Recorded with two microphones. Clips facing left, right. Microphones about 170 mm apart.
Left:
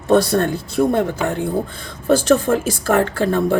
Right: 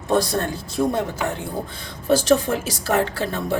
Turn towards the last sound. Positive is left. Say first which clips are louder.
# left 7 dB
turn(degrees=55)  # may be behind; listen again after turning